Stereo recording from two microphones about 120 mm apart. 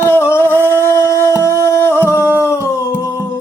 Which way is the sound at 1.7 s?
20° left (ahead or behind).